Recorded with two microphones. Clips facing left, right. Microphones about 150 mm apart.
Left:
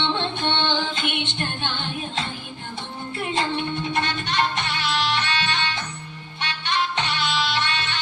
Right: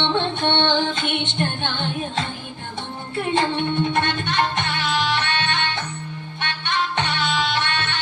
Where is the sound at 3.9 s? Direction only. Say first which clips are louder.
Right 3 dB; 50° right (ahead or behind).